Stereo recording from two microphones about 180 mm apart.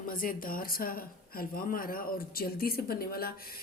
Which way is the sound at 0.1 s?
50° left (ahead or behind).